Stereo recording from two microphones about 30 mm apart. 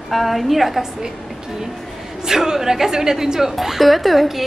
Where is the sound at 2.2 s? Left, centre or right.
Centre.